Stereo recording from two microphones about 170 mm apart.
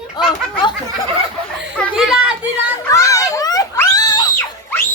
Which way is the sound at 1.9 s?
5° right (ahead or behind).